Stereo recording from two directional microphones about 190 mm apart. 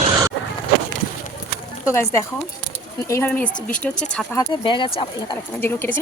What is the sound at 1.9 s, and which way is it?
Speech, 15° left (ahead or behind).